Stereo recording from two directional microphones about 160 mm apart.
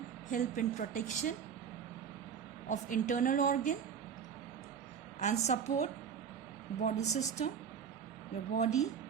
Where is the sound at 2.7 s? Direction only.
55° left (ahead or behind).